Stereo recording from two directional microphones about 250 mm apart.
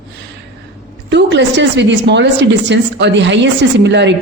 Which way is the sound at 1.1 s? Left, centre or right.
Right.